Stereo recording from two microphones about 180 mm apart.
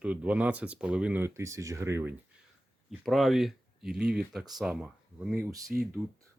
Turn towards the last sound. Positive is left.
turn(degrees=-5)  # may be behind; listen again after turning